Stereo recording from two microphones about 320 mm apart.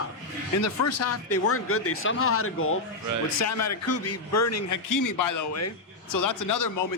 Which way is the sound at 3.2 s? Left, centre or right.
Left.